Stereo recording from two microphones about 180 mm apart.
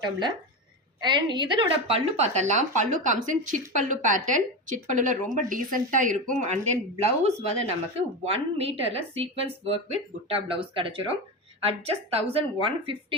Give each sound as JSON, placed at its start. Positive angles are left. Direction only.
{"t": 0.0, "sound": "a woman's voice", "side_deg": -25}